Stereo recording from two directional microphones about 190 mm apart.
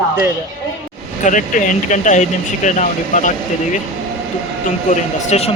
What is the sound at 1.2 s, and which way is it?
Speech, 45° left (ahead or behind).